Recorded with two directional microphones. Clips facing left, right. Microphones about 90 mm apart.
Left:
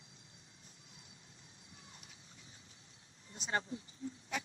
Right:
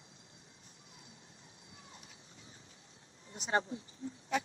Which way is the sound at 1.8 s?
35° right (ahead or behind).